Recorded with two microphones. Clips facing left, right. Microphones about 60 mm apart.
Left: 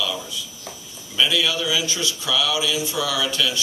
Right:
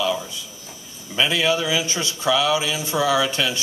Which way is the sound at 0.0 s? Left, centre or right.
Right.